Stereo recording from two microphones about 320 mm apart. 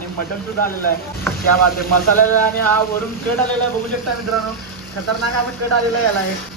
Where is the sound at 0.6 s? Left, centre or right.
Left.